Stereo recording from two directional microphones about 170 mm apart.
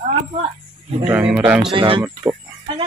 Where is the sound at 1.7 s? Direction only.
30° right (ahead or behind).